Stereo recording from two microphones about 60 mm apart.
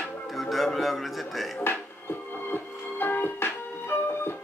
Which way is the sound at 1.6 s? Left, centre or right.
Left.